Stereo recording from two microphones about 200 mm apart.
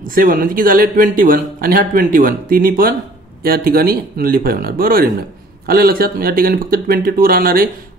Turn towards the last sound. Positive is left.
turn(degrees=-50)  # may be behind; listen again after turning